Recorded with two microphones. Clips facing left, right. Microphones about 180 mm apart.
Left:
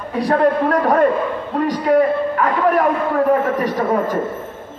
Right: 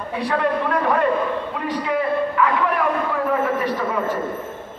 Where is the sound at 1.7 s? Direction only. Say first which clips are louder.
Left 7 dB; 45° left (ahead or behind).